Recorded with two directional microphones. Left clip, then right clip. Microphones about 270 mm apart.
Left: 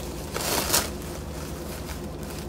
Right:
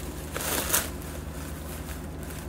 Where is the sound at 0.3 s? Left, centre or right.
Centre.